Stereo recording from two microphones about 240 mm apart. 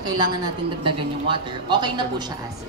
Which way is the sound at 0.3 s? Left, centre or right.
Centre.